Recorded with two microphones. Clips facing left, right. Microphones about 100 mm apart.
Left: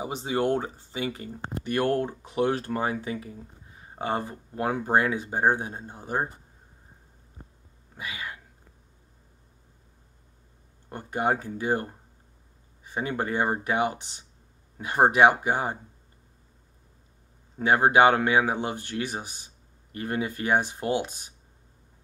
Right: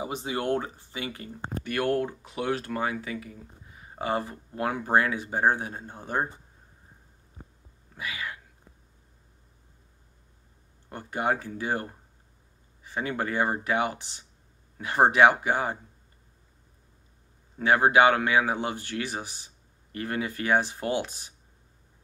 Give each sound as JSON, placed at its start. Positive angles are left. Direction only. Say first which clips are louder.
{"t": 0.0, "sound": "speech", "louder": "left 3 dB", "side_deg": 30}
{"t": 5.9, "sound": "speech", "louder": "even", "side_deg": 15}
{"t": 7.9, "sound": "speech", "louder": "right 1 dB", "side_deg": 25}
{"t": 10.9, "sound": "speech", "louder": "left 2 dB", "side_deg": 25}
{"t": 17.6, "sound": "speech", "louder": "left 1 dB", "side_deg": 25}